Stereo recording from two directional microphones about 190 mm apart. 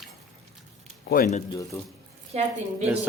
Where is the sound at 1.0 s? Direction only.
50° left (ahead or behind).